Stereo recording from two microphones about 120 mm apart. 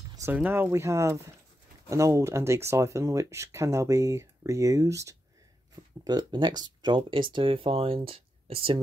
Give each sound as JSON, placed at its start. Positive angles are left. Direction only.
{"t": 0.3, "sound": "speech", "side_deg": -15}
{"t": 6.0, "sound": "speech", "side_deg": -35}